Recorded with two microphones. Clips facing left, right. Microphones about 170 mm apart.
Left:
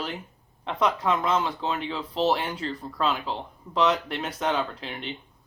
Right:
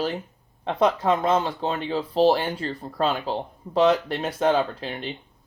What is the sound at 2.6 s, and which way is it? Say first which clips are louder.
Speech: right 3 dB; 50° right (ahead or behind).